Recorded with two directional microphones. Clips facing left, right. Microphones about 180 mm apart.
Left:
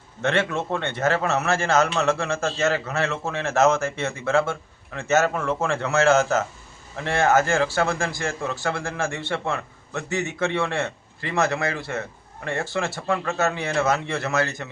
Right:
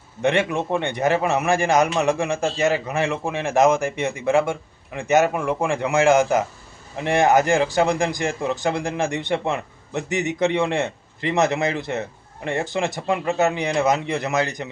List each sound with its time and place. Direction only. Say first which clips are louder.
0.2 s a man's voice: right 3 dB; 15° right (ahead or behind)